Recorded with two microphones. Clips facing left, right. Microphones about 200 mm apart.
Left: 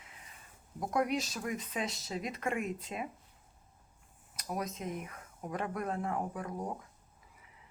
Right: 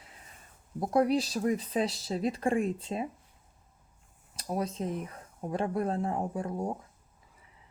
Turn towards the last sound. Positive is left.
turn(degrees=-30)  # may be behind; listen again after turning